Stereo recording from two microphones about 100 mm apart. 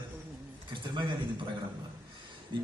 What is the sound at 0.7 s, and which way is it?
Speech, 55° right (ahead or behind).